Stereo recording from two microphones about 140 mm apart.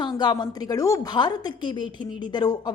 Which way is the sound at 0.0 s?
30° left (ahead or behind).